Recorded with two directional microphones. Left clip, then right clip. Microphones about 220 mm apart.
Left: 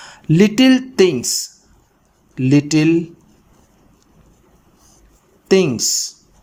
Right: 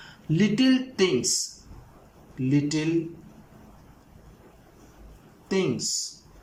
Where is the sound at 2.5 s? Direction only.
40° left (ahead or behind).